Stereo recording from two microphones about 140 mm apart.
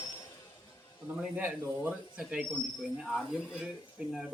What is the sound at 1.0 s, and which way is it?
Speech, 10° right (ahead or behind).